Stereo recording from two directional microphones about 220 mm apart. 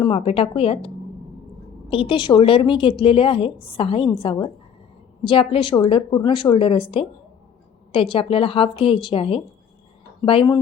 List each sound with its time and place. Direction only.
0.0 s a woman's voice: 25° left (ahead or behind)
1.9 s a woman's voice: 25° left (ahead or behind)